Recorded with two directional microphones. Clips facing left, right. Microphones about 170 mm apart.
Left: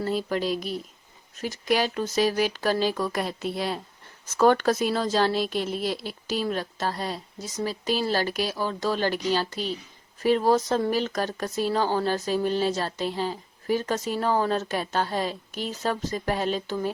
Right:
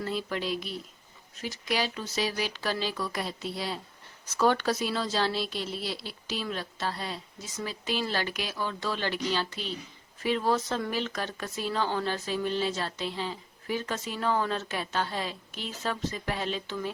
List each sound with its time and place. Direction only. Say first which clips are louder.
0.0 s a woman's voice: left 6 dB; 40° left (ahead or behind)